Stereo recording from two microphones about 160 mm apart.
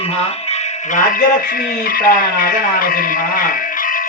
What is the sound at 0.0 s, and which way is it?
Speech, 40° left (ahead or behind).